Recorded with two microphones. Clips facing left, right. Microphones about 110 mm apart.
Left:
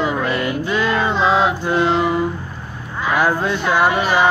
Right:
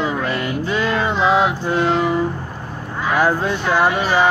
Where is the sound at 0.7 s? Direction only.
10° right (ahead or behind).